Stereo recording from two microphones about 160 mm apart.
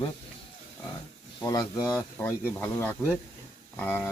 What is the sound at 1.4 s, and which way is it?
Speech, 20° left (ahead or behind).